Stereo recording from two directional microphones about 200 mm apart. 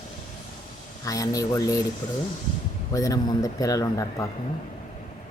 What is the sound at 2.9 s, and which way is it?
A man's voice, 15° left (ahead or behind).